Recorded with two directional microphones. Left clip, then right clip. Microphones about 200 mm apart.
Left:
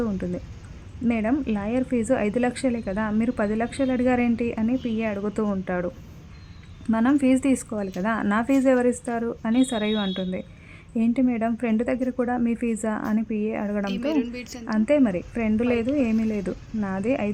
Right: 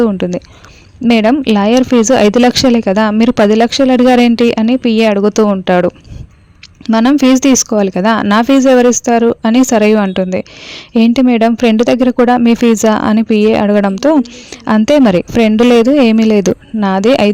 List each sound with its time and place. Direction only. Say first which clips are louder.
0.0 s speech: right 16 dB; 45° right (ahead or behind)
6.9 s speech: right 12 dB; 40° right (ahead or behind)